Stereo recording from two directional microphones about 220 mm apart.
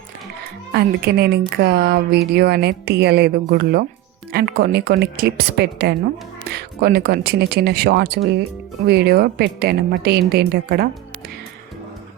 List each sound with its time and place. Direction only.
0.7 s speech: 45° right (ahead or behind)